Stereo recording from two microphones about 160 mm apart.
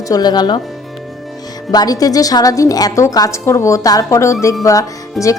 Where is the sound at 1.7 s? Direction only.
25° left (ahead or behind).